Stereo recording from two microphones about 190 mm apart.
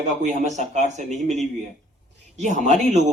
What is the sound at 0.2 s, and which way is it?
Speech, 40° right (ahead or behind).